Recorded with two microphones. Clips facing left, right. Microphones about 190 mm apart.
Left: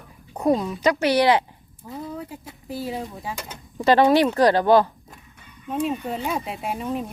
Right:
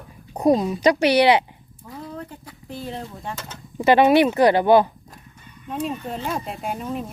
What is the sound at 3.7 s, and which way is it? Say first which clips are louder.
Speech: right 2 dB; 15° right (ahead or behind).